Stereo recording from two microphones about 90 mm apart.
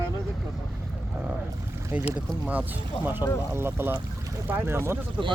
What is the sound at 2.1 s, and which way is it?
Speech, 15° right (ahead or behind).